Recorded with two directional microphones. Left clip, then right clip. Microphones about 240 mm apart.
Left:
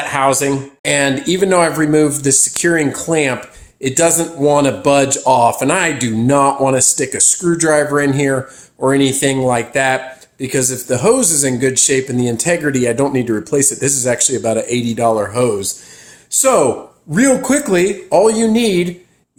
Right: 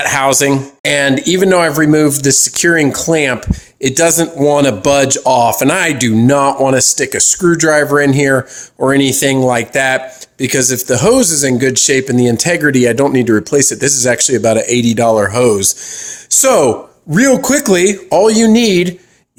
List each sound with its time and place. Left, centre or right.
0.0 s speech: right